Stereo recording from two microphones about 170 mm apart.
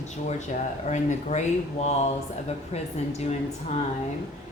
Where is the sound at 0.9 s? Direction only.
45° left (ahead or behind).